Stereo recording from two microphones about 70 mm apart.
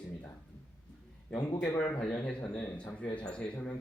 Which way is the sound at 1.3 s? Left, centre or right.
Centre.